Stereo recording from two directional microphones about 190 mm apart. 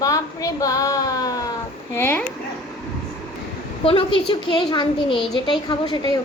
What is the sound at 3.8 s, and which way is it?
A woman's voice, 30° left (ahead or behind).